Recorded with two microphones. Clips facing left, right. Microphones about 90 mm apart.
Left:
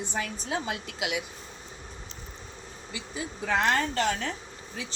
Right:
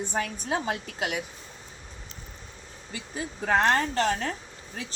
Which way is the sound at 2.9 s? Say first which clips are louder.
Right 1 dB; 45° right (ahead or behind).